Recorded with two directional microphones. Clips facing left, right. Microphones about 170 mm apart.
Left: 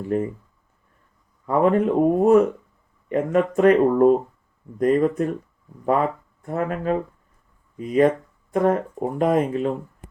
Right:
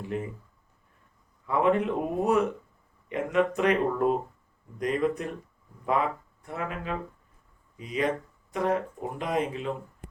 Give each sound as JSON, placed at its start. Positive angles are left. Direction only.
{"t": 0.1, "sound": "speech", "side_deg": 45}
{"t": 1.5, "sound": "speech", "side_deg": 45}